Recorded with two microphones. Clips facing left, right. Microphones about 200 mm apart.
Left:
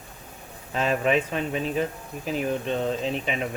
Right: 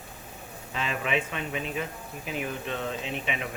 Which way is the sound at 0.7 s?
40° left (ahead or behind).